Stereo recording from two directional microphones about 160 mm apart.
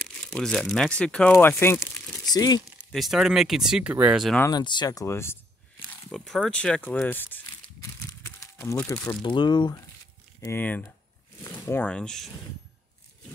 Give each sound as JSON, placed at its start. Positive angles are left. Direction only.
{"t": 0.0, "sound": "crumpling", "side_deg": 5}
{"t": 0.7, "sound": "speech", "side_deg": 5}
{"t": 2.9, "sound": "speech", "side_deg": 0}
{"t": 4.4, "sound": "speech", "side_deg": 25}
{"t": 8.4, "sound": "speech", "side_deg": 15}
{"t": 10.4, "sound": "speech", "side_deg": 15}